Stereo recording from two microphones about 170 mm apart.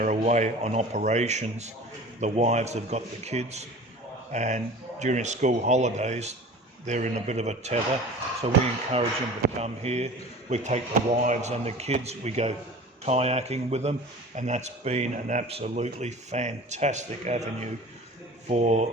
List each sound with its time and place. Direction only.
0.0 s speech: 45° right (ahead or behind)